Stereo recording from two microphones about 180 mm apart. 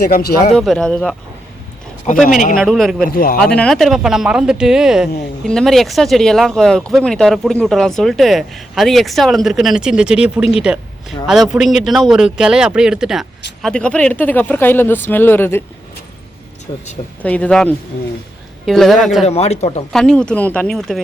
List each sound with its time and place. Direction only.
0.0 s speech: 55° left (ahead or behind)
0.5 s speech: centre (ahead or behind)
2.1 s a man's voice: 40° left (ahead or behind)
2.6 s speech: centre (ahead or behind)
3.1 s a man's voice: 55° left (ahead or behind)
3.4 s speech: 5° left (ahead or behind)
17.2 s speech: 5° left (ahead or behind)
19.2 s a man's voice: 35° left (ahead or behind)
19.9 s speech: 5° left (ahead or behind)